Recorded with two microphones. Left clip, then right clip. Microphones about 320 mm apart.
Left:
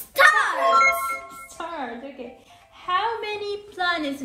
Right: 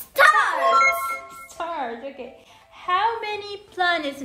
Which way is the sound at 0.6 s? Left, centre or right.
Centre.